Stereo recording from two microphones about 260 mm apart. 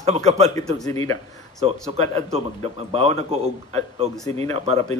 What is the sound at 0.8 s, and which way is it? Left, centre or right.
Speech, centre.